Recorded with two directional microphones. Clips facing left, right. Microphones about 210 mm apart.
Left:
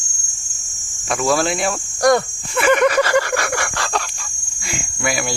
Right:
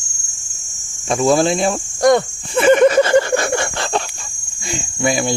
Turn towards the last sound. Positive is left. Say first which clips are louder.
# right 5 dB
turn(degrees=-25)  # may be behind; listen again after turning